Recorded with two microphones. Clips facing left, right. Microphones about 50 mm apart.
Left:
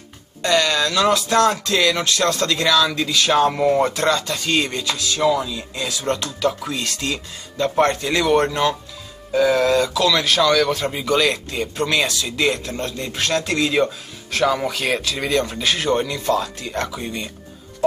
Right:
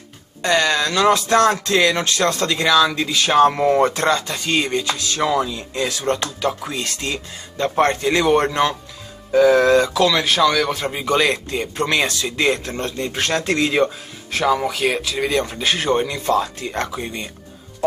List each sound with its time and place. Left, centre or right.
0.4 s speech: right
4.9 s speech: right
14.4 s speech: centre